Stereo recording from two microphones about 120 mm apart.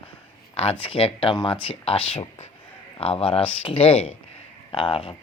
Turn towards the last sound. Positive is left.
turn(degrees=50)  # may be behind; listen again after turning